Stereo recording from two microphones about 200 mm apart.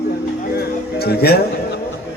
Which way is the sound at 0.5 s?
55° left (ahead or behind).